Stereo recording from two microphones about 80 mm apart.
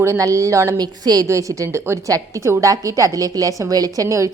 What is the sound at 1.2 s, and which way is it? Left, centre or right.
A woman's voice, right.